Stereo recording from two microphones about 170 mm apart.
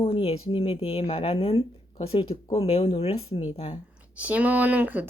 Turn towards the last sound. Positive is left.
turn(degrees=-10)  # may be behind; listen again after turning